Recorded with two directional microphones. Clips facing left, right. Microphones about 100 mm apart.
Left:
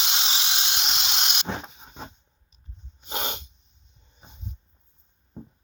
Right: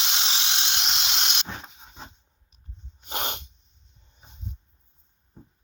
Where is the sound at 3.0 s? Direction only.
55° right (ahead or behind).